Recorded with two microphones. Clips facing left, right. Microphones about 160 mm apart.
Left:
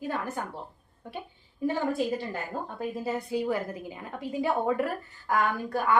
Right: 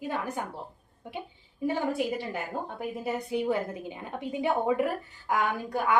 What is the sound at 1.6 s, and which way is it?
A woman's voice, 15° right (ahead or behind).